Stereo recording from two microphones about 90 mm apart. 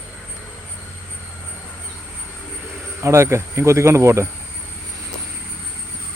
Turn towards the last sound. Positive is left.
turn(degrees=-30)  # may be behind; listen again after turning